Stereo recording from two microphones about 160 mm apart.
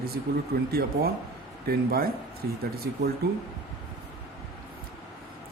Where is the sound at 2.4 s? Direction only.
90° right.